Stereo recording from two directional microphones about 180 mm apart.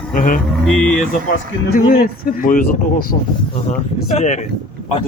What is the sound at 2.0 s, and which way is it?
Speech, 50° left (ahead or behind).